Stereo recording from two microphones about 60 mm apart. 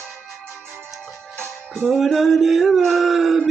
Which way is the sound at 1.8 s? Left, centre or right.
Centre.